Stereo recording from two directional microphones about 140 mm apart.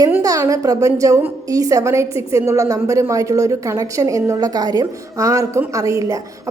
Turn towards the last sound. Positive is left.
turn(degrees=-25)  # may be behind; listen again after turning